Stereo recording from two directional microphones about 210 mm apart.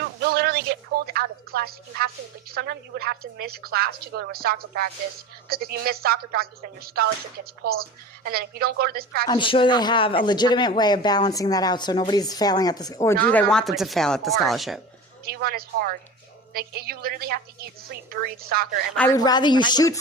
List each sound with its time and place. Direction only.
0.0 s a sound: 50° right (ahead or behind)
2.5 s a woman's voice: 50° right (ahead or behind)
9.2 s speech: 20° left (ahead or behind)
13.3 s speech: 5° left (ahead or behind)
15.2 s a woman's voice: 45° right (ahead or behind)
18.9 s speech: 15° left (ahead or behind)